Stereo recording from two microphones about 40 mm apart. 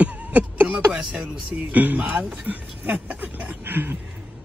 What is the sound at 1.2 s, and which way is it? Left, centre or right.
Speech, right.